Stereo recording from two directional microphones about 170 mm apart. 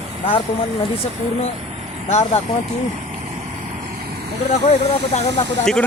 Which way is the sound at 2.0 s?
40° left (ahead or behind).